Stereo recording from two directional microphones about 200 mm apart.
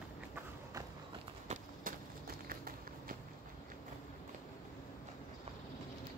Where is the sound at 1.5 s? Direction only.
45° right (ahead or behind).